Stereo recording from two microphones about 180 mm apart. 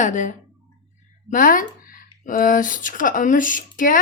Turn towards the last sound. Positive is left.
turn(degrees=50)  # may be behind; listen again after turning